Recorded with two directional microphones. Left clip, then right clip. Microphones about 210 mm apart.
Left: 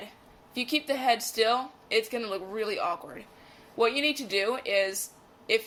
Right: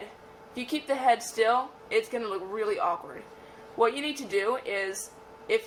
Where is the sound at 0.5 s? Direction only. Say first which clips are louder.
Left 1 dB; 25° left (ahead or behind).